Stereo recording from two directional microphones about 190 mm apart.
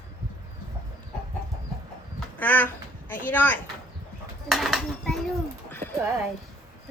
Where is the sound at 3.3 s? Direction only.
10° left (ahead or behind).